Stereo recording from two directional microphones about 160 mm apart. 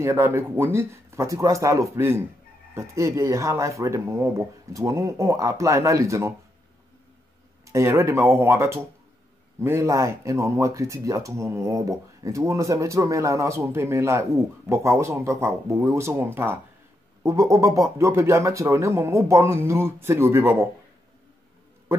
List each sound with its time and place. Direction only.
0.0 s speech: 15° right (ahead or behind)
7.6 s speech: 20° right (ahead or behind)